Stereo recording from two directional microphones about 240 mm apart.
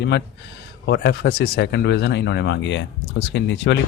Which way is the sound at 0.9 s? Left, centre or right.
Left.